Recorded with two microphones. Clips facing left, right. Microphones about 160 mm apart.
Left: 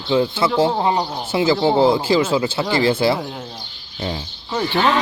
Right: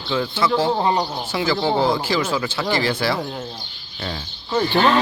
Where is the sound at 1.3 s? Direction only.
25° left (ahead or behind).